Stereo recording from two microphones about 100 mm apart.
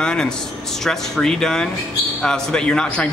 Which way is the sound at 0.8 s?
5° left (ahead or behind).